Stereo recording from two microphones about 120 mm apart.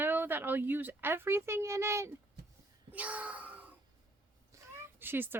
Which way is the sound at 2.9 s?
15° right (ahead or behind).